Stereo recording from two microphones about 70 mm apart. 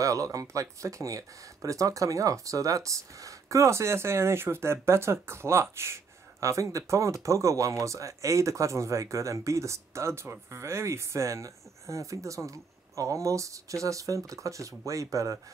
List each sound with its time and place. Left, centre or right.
0.0 s speech: right